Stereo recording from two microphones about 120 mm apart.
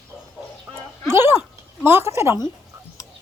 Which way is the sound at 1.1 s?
20° right (ahead or behind).